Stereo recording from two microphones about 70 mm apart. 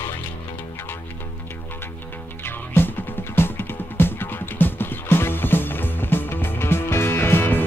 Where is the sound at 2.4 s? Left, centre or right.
Left.